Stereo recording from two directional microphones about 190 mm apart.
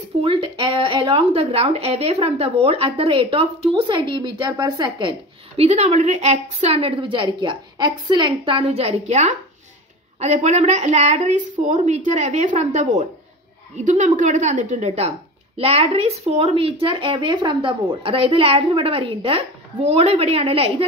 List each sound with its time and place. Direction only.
0.2 s speech: 30° right (ahead or behind)
5.6 s a woman's voice: 35° right (ahead or behind)